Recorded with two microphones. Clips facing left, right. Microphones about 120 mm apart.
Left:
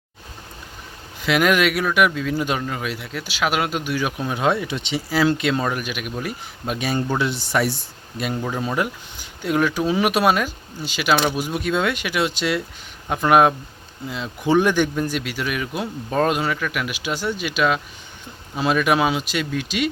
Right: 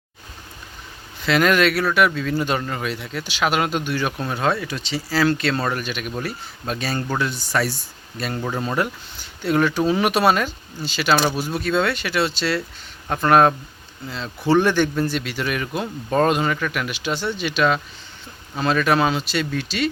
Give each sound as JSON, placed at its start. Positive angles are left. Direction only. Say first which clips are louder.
{"t": 1.2, "sound": "speech", "louder": "right 1 dB", "side_deg": 10}
{"t": 8.2, "sound": "speech", "louder": "left 1 dB", "side_deg": 5}